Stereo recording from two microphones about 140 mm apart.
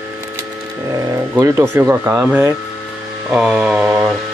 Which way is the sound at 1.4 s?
15° right (ahead or behind).